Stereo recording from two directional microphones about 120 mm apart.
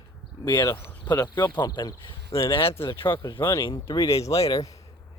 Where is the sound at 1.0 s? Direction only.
35° left (ahead or behind).